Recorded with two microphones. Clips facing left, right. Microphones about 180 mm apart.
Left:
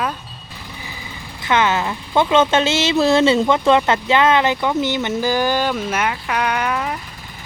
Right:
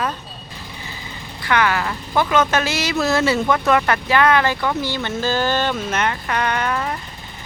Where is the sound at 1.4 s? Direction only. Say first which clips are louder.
Left 1 dB; 20° left (ahead or behind).